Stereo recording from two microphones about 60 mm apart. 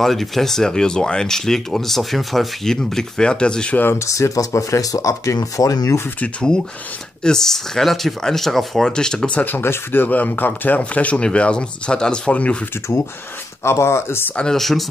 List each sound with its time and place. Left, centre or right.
0.0 s speech: centre
3.9 s speech: left
7.2 s speech: centre
9.4 s speech: left
13.7 s speech: left
14.3 s speech: centre
14.6 s speech: centre